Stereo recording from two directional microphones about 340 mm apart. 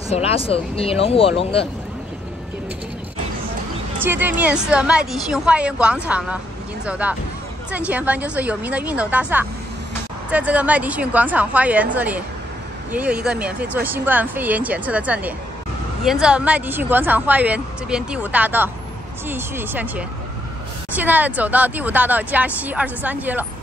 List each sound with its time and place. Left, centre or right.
0.1 s speech: centre
4.0 s speech: centre